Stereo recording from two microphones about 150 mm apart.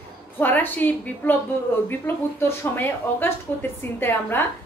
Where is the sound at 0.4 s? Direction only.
10° left (ahead or behind).